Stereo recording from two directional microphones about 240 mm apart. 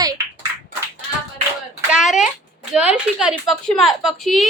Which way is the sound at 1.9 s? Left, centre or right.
Centre.